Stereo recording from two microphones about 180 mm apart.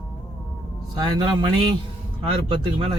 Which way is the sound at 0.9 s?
25° right (ahead or behind).